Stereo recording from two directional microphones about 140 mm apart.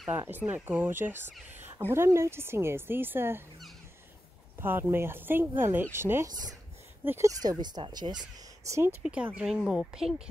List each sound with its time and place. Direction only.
0.1 s speech: 15° right (ahead or behind)
4.6 s speech: 15° right (ahead or behind)
9.0 s speech: 10° right (ahead or behind)